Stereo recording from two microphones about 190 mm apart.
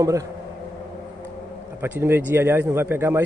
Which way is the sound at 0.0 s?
15° right (ahead or behind).